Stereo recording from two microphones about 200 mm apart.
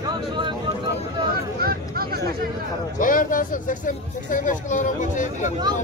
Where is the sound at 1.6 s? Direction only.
50° right (ahead or behind).